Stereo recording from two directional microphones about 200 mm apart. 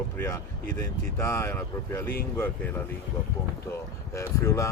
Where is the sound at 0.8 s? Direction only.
15° left (ahead or behind).